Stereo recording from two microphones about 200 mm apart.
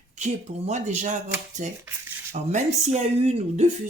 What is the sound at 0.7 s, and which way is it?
Speech, 35° right (ahead or behind).